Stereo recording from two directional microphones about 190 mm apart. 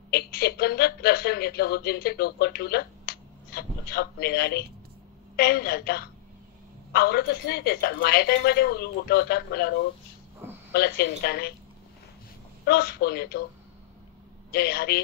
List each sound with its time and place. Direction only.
0.1 s a woman's voice: 55° left (ahead or behind)
12.6 s a woman's voice: 55° left (ahead or behind)
14.5 s a woman's voice: 55° left (ahead or behind)